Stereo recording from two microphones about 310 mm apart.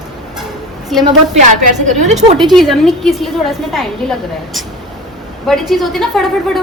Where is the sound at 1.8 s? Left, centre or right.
Right.